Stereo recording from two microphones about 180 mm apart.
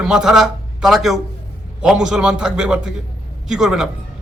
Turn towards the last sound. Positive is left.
turn(degrees=0)  # may be behind; listen again after turning